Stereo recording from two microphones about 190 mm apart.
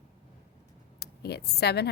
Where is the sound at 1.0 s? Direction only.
60° left (ahead or behind).